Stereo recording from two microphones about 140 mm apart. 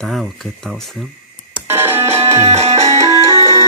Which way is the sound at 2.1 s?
45° right (ahead or behind).